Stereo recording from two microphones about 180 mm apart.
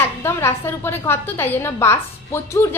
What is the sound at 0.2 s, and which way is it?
A woman's voice, 15° left (ahead or behind).